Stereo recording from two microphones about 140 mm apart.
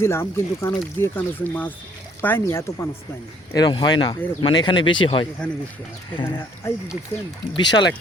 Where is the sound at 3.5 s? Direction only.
30° left (ahead or behind).